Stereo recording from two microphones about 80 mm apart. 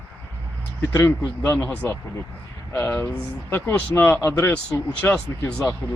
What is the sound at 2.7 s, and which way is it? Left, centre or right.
Speech, left.